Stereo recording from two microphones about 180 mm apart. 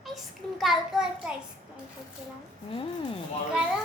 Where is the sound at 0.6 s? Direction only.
Centre (ahead or behind).